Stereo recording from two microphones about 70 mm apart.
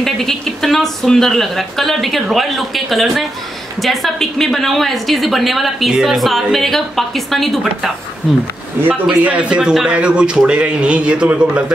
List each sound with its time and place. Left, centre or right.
0.0 s a woman's voice: centre
9.2 s speech: centre